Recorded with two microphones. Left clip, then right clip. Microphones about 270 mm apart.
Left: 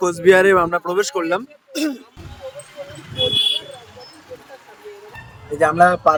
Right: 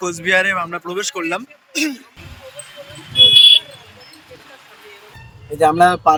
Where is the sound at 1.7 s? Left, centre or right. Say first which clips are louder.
Right 2 dB; left.